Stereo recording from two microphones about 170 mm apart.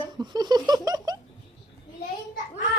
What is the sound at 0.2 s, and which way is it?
Laughter, 25° right (ahead or behind).